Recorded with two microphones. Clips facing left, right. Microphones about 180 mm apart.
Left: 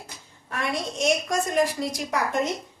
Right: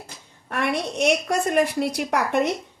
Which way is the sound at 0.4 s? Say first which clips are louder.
Right 4 dB; 65° right (ahead or behind).